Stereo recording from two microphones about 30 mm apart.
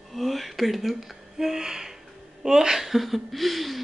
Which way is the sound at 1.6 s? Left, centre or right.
Centre.